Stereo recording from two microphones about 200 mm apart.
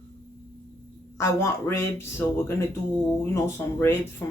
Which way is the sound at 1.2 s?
15° left (ahead or behind).